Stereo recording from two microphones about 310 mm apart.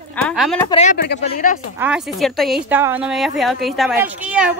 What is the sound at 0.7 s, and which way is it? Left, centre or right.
Speech, left.